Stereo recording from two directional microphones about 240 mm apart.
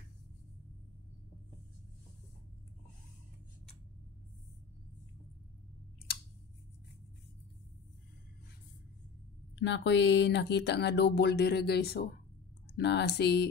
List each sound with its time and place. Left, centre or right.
9.6 s speech: left